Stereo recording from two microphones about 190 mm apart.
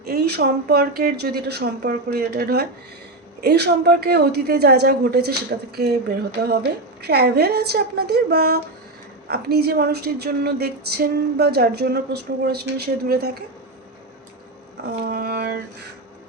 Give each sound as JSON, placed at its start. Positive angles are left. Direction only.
{"t": 0.0, "sound": "a woman's voice", "side_deg": -55}
{"t": 15.0, "sound": "a woman's voice", "side_deg": -55}